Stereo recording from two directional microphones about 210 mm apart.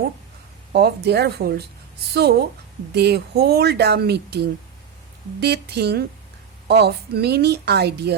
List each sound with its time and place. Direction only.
0.7 s speech: 50° right (ahead or behind)